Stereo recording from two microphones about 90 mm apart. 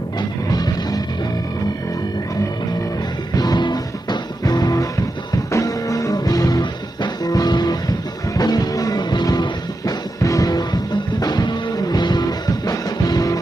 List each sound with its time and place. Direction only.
0.2 s music: 50° left (ahead or behind)
3.3 s music: 50° left (ahead or behind)
5.5 s music: 35° left (ahead or behind)